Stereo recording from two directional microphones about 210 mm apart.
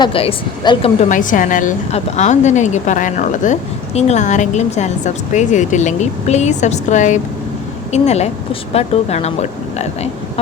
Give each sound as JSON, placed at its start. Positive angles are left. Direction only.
{"t": 0.0, "sound": "speech", "side_deg": 25}
{"t": 1.0, "sound": "a woman's voice", "side_deg": 40}